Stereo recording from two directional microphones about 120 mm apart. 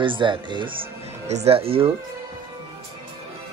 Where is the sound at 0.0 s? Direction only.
45° right (ahead or behind).